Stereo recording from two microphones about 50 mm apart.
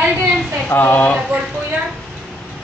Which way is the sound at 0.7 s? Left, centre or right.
Left.